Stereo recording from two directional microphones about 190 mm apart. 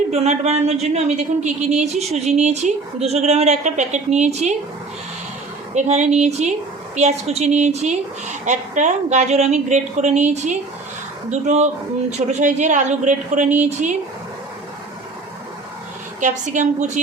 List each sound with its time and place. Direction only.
0.1 s speech: 35° right (ahead or behind)
5.7 s speech: 35° right (ahead or behind)
16.2 s speech: 40° right (ahead or behind)